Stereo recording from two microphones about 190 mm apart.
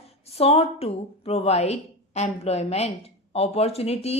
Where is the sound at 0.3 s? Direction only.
30° left (ahead or behind).